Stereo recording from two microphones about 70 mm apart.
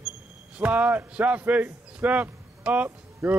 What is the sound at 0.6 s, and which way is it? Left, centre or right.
A man's voice, right.